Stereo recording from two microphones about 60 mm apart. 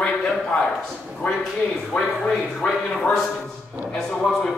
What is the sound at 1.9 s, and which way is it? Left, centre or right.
A man's voice, centre.